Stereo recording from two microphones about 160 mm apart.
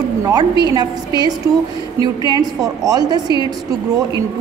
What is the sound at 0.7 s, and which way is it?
A woman's voice, 25° right (ahead or behind).